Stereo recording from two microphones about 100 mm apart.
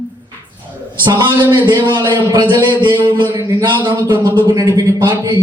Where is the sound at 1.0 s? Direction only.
45° right (ahead or behind).